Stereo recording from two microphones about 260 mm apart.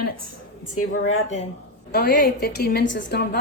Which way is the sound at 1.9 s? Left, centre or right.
Left.